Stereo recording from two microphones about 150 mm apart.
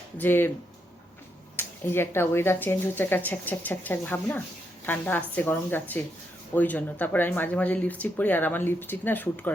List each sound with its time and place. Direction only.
0.2 s speech: 15° left (ahead or behind)
1.5 s speech: 15° left (ahead or behind)